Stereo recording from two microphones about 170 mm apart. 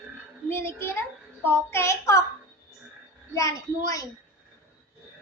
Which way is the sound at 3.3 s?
20° left (ahead or behind).